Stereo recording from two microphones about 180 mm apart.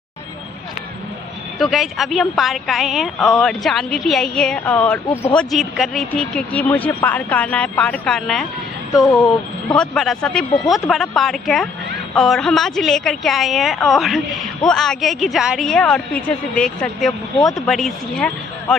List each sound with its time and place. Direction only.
1.6 s a woman's voice: centre (ahead or behind)
9.0 s speech: 20° left (ahead or behind)
9.8 s a woman's voice: 5° left (ahead or behind)